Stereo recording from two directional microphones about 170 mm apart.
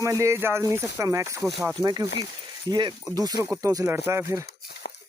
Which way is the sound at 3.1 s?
20° right (ahead or behind).